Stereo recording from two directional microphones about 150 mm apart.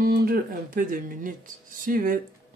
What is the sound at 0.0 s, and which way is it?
Speech, 85° right.